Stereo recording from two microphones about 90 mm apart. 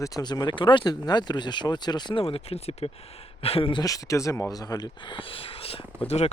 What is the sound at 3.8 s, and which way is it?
Speech, 40° left (ahead or behind).